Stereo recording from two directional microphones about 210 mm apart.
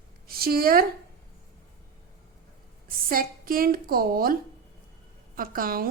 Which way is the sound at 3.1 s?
45° right (ahead or behind).